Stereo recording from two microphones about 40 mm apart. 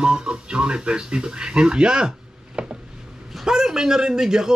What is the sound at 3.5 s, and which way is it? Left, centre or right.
A man's voice, centre.